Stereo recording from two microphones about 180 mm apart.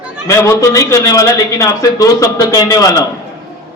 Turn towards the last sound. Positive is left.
turn(degrees=20)  # may be behind; listen again after turning